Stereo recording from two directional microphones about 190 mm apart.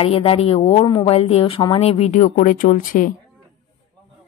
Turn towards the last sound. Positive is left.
turn(degrees=45)  # may be behind; listen again after turning